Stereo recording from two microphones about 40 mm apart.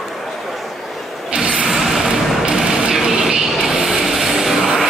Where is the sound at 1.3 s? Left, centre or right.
Right.